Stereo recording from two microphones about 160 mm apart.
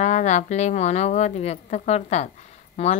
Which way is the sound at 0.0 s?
45° left (ahead or behind).